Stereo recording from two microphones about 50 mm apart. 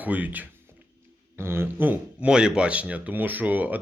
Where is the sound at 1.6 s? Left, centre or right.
Right.